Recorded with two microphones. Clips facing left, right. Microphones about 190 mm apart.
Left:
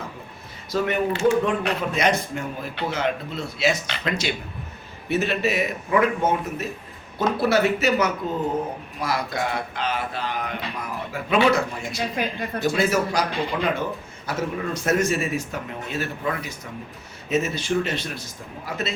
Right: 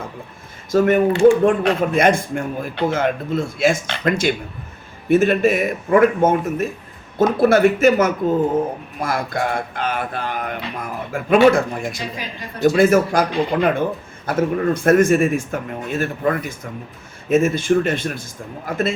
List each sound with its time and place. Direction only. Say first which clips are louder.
0.7 s speech: right 8 dB; 50° right (ahead or behind)
11.9 s a woman's voice: left 3 dB; 55° left (ahead or behind)
12.6 s speech: right 8 dB; 50° right (ahead or behind)